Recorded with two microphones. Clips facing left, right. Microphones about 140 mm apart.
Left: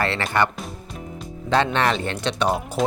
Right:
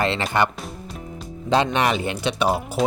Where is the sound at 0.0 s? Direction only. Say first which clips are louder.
Right 1 dB; 15° right (ahead or behind).